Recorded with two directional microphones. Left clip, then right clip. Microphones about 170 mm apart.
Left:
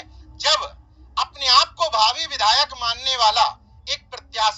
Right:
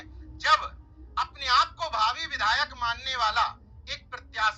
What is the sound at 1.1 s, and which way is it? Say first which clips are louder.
Telephone: left 7 dB; 45° left (ahead or behind).